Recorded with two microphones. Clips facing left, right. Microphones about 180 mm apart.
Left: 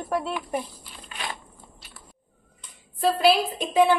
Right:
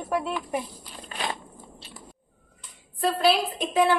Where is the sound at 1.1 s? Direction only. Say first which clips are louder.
Right 3 dB; 35° right (ahead or behind).